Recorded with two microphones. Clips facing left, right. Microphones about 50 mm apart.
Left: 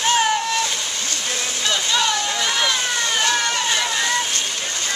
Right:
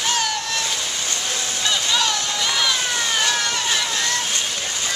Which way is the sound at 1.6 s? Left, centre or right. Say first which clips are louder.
Left 1 dB; centre.